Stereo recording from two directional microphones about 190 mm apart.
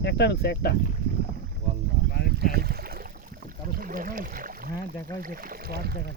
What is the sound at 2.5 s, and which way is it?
Speech, 55° right (ahead or behind).